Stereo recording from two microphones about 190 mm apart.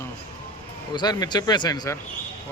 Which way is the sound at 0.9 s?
20° left (ahead or behind).